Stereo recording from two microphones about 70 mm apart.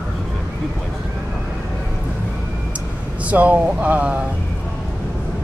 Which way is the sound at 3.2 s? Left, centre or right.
Right.